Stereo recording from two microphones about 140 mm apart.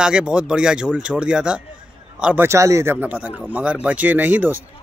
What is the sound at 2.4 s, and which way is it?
A man's voice, 20° right (ahead or behind).